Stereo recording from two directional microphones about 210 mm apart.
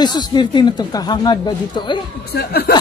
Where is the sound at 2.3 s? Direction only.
45° left (ahead or behind).